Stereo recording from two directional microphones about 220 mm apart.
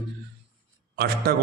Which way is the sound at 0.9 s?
45° right (ahead or behind).